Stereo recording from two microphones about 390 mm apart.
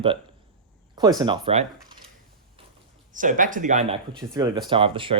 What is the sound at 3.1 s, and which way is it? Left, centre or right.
Speech, centre.